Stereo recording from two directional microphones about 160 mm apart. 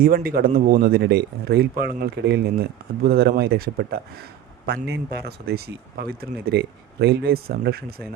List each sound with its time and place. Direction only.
0.0 s speech: 65° right (ahead or behind)
4.6 s speech: 90° right; by 8.0 s 75° right (ahead or behind)